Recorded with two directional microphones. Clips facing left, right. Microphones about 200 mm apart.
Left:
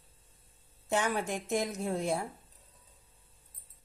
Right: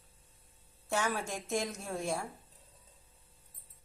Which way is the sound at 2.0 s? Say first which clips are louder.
Left 1 dB; 20° left (ahead or behind).